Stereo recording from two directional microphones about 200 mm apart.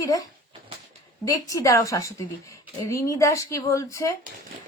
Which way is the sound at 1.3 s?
15° left (ahead or behind).